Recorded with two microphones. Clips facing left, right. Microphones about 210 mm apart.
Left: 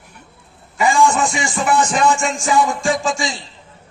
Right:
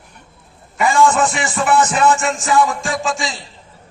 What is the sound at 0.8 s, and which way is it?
Music, centre (ahead or behind).